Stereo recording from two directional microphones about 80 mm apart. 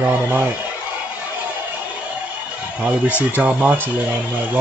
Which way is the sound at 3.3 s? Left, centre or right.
Right.